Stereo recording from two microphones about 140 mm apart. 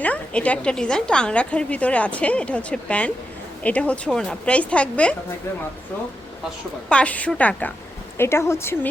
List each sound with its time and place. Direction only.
0.0 s a woman's voice: 10° left (ahead or behind)
6.8 s a woman's voice: 10° left (ahead or behind)